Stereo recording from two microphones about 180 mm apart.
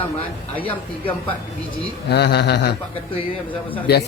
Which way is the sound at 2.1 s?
65° left (ahead or behind).